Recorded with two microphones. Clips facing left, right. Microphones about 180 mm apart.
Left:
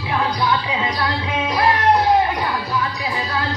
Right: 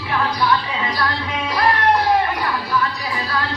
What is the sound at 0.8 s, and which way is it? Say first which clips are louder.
Music: left 1 dB; 20° left (ahead or behind).